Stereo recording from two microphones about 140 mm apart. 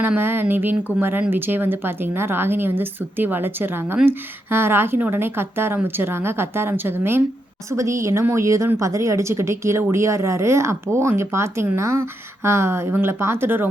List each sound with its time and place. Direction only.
0.0 s a woman's voice: 15° right (ahead or behind)